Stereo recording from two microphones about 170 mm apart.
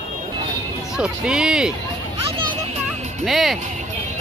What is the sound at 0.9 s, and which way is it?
Speech, 5° right (ahead or behind).